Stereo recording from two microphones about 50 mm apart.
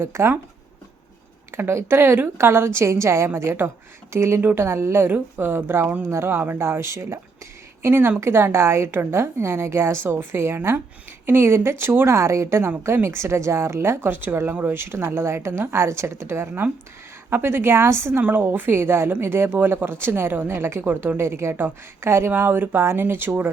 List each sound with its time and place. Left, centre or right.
0.0 s a woman's voice: right
1.5 s speech: right
2.5 s a woman's voice: right
4.4 s speech: right
4.6 s a woman's voice: right
5.0 s a woman's voice: right
7.8 s a woman's voice: right
12.0 s a woman's voice: right
14.1 s a woman's voice: right
18.2 s a woman's voice: right
20.6 s a woman's voice: right
22.3 s speech: right